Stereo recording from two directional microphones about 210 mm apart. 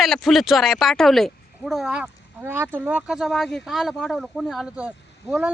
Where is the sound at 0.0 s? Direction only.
Centre (ahead or behind).